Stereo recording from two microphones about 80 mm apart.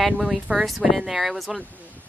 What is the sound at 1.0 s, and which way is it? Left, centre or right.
Speech, centre.